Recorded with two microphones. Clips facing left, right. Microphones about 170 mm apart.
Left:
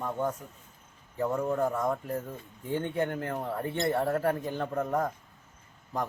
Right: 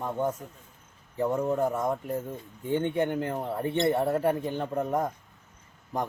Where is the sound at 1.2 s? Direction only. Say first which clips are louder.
Right 2 dB; 20° right (ahead or behind).